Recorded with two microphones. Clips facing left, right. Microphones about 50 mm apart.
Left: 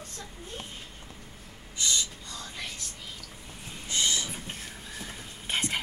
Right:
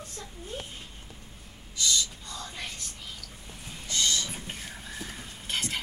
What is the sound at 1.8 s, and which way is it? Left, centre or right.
Gasp, left.